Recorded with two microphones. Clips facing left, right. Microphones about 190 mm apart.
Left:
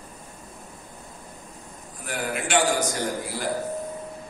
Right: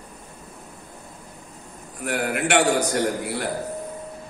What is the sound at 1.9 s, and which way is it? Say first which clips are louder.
A man's voice: right 5 dB; 65° right (ahead or behind).